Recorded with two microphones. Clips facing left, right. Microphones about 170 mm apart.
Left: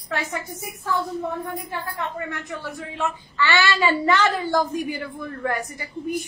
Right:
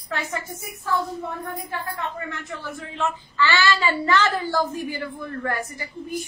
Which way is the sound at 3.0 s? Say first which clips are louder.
Right 1 dB; 15° left (ahead or behind).